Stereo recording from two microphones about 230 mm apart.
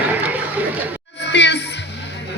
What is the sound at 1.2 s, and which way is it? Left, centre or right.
Music, left.